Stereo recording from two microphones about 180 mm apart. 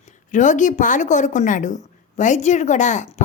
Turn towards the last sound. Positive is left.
turn(degrees=40)  # may be behind; listen again after turning